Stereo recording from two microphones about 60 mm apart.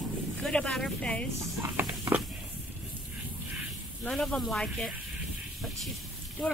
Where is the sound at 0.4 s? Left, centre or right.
Centre.